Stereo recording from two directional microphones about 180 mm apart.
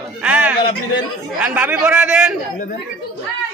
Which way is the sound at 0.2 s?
5° right (ahead or behind).